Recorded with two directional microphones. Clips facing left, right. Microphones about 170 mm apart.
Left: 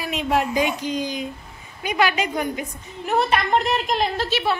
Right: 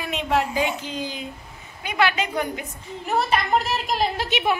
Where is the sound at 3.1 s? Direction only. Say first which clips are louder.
Left 2 dB; centre (ahead or behind).